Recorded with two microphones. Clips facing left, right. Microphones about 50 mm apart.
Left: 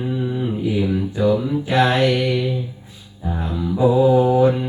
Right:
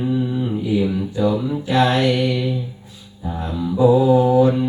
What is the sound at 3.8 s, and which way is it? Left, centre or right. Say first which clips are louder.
Mantra: right 1 dB; centre.